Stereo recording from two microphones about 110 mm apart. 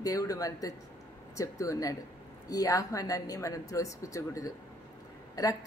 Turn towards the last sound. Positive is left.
turn(degrees=30)  # may be behind; listen again after turning